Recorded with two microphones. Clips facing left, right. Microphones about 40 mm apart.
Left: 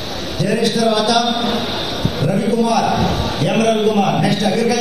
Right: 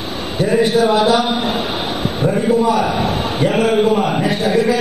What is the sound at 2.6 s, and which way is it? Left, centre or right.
A man's voice, right.